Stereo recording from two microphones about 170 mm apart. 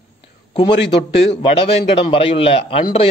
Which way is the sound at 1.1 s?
35° left (ahead or behind).